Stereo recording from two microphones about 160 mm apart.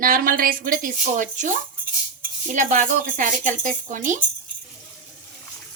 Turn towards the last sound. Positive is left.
turn(degrees=-50)  # may be behind; listen again after turning